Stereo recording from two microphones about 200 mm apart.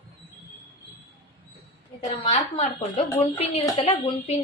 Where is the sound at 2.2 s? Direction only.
30° left (ahead or behind).